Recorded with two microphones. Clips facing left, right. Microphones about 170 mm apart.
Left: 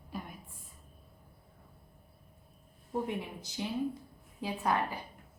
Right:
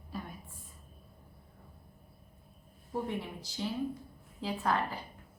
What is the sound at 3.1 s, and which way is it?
A woman's voice, 15° left (ahead or behind).